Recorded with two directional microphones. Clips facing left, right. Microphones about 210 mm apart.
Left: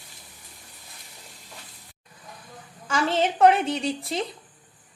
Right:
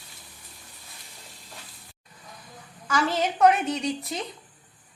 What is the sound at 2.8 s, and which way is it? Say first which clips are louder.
Speech: left 2 dB; 25° left (ahead or behind).